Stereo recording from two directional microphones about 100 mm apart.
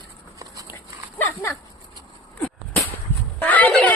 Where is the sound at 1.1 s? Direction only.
20° left (ahead or behind).